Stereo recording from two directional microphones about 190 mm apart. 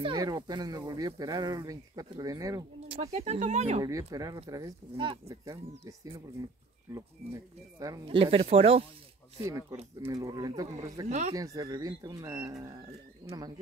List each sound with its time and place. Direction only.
0.0 s speech: 25° right (ahead or behind)
2.9 s speech: 35° right (ahead or behind)
4.1 s speech: 20° right (ahead or behind)
9.4 s speech: 15° right (ahead or behind)
11.1 s speech: 35° right (ahead or behind)
11.3 s speech: 20° right (ahead or behind)